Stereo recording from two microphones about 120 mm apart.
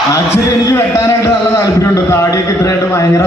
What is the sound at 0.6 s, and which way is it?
A man's voice, 25° left (ahead or behind).